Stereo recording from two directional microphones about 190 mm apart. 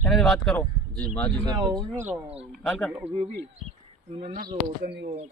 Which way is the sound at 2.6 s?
Centre (ahead or behind).